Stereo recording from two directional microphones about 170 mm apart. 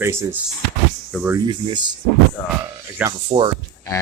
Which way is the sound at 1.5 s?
25° right (ahead or behind).